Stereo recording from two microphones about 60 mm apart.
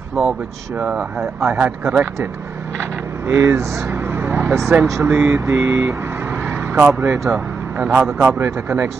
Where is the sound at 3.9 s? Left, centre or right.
Right.